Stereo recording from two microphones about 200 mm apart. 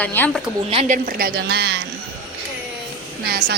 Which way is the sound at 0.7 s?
35° right (ahead or behind).